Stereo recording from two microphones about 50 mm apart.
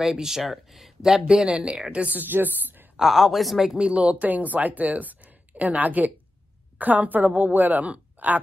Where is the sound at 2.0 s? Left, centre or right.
Right.